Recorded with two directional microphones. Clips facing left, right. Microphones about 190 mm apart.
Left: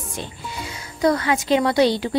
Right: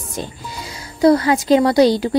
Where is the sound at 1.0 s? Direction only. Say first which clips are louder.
Right 6 dB; 35° right (ahead or behind).